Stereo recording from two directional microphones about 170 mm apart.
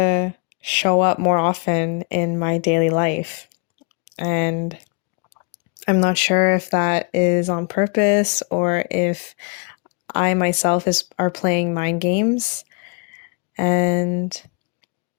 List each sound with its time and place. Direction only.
0.0 s speech: 45° left (ahead or behind)
5.3 s speech: 40° left (ahead or behind)